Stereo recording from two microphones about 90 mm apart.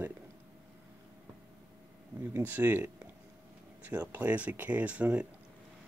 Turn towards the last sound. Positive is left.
turn(degrees=-15)  # may be behind; listen again after turning